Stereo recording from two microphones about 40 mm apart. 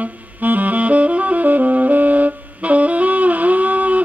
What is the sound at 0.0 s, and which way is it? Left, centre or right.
Saxophone, right.